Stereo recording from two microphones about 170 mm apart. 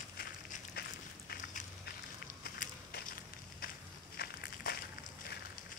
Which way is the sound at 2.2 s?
60° left (ahead or behind).